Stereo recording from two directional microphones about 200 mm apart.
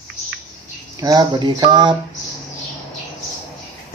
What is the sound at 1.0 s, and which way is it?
Speech, 20° right (ahead or behind).